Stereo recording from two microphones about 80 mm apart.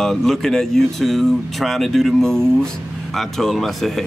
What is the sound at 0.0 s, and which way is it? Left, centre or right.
Speech, centre.